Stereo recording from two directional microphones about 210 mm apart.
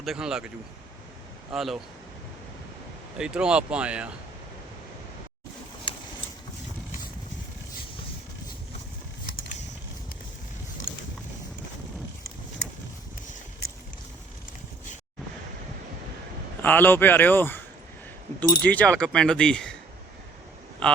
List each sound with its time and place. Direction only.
0.0 s speech: centre (ahead or behind)
1.5 s speech: centre (ahead or behind)
3.2 s speech: 5° right (ahead or behind)
10.9 s boat: 65° left (ahead or behind)
16.6 s speech: 10° left (ahead or behind)
18.6 s speech: 5° left (ahead or behind)
20.8 s speech: 5° left (ahead or behind)